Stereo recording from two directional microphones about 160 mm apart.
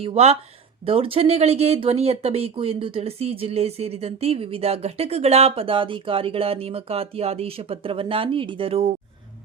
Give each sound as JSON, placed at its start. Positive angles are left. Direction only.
{"t": 0.0, "sound": "speech", "side_deg": -40}